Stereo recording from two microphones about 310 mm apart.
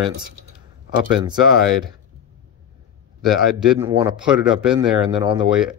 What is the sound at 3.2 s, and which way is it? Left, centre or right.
Speech, centre.